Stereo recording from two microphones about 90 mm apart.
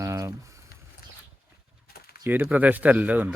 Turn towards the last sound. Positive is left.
turn(degrees=-15)  # may be behind; listen again after turning